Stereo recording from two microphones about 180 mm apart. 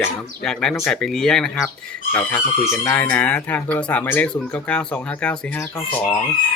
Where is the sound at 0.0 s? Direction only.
5° left (ahead or behind).